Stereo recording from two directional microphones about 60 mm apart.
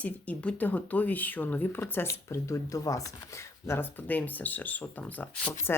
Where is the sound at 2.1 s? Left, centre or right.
Left.